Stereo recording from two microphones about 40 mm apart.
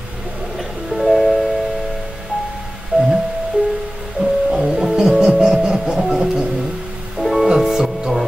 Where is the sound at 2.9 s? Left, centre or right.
Centre.